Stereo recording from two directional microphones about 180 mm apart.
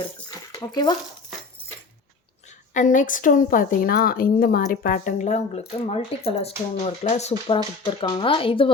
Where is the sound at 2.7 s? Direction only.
45° left (ahead or behind).